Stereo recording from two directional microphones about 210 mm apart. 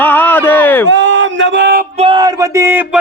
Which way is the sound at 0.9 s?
60° right (ahead or behind).